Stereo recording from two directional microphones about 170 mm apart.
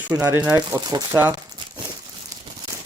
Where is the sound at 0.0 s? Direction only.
15° right (ahead or behind).